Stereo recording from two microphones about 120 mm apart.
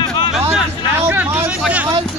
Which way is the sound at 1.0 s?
15° right (ahead or behind).